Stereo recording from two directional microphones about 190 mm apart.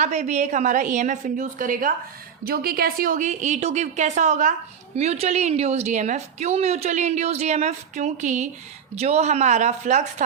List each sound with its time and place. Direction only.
0.0 s a woman's voice: 40° right (ahead or behind)